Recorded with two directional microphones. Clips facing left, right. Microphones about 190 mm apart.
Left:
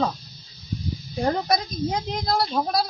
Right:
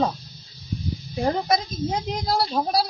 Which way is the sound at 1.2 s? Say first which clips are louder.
Even; centre (ahead or behind).